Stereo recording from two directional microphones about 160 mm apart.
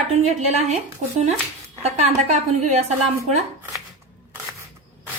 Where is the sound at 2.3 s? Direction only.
45° right (ahead or behind).